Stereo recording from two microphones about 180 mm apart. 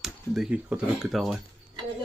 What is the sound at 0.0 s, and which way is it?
Speech, centre (ahead or behind).